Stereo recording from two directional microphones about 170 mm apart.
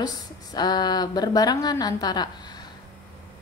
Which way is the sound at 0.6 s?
25° left (ahead or behind).